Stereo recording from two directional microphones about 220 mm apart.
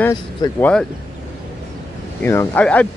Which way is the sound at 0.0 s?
15° left (ahead or behind).